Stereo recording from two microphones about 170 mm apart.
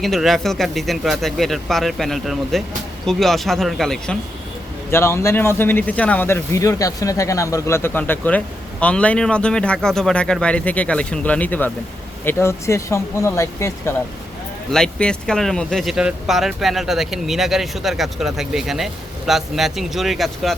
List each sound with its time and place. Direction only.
0.0 s speech: centre (ahead or behind)
4.9 s speech: 15° left (ahead or behind)
14.7 s speech: 5° left (ahead or behind)